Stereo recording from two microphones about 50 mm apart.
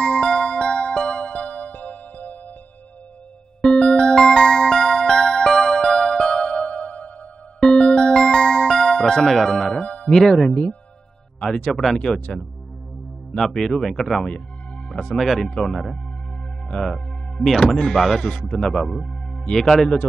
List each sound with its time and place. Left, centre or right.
0.0 s music: centre; by 2.3 s left
3.6 s music: centre; by 7.1 s left
7.6 s music: centre
10.0 s speech: centre
10.5 s a man's voice: left
11.7 s speech: centre
12.0 s a man's voice: centre
13.4 s speech: centre
14.9 s music: centre
15.1 s speech: centre